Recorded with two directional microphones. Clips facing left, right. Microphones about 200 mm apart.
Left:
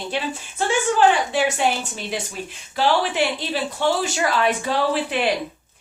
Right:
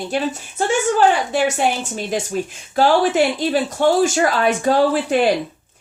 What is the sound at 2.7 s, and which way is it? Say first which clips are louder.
Speech: right 5 dB; 45° right (ahead or behind).